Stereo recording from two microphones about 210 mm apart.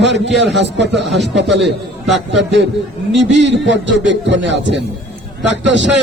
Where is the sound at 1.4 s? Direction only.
55° right (ahead or behind).